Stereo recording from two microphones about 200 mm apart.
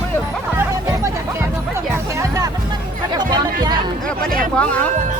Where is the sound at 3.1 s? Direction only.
20° right (ahead or behind).